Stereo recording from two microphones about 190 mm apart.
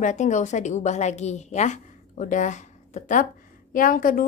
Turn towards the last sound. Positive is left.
turn(degrees=45)  # may be behind; listen again after turning